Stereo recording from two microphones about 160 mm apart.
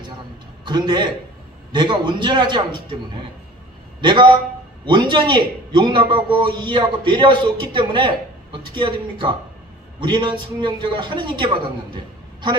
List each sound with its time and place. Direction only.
0.7 s a man's voice: 25° right (ahead or behind)
4.0 s a man's voice: 30° right (ahead or behind)